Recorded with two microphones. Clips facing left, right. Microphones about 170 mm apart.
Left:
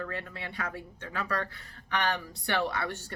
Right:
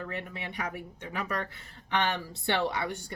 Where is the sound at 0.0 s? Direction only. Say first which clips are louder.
Even; 20° right (ahead or behind).